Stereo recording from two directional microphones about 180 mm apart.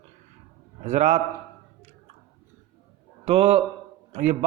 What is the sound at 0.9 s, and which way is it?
Speech, 40° right (ahead or behind).